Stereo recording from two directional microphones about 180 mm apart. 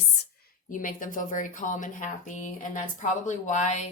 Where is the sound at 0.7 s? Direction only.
50° left (ahead or behind).